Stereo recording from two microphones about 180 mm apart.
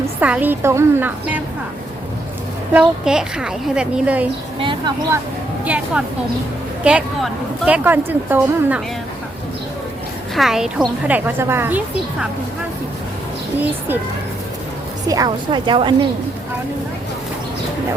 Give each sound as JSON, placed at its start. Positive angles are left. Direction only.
{"t": 0.2, "sound": "speech", "side_deg": -10}
{"t": 2.7, "sound": "a woman's voice", "side_deg": -5}
{"t": 5.6, "sound": "speech", "side_deg": -5}
{"t": 10.3, "sound": "speech", "side_deg": 0}
{"t": 15.0, "sound": "a woman's voice", "side_deg": -20}